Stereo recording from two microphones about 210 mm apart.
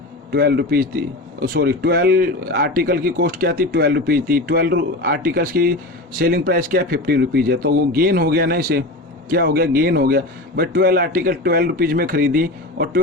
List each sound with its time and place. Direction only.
0.3 s speech: 50° right (ahead or behind)